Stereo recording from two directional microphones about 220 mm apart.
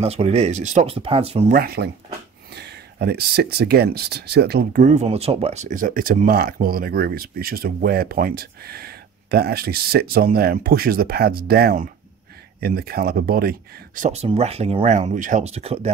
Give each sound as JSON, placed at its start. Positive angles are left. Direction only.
{"t": 0.0, "sound": "speech", "side_deg": -30}
{"t": 1.5, "sound": "speech", "side_deg": -45}
{"t": 4.8, "sound": "speech", "side_deg": -30}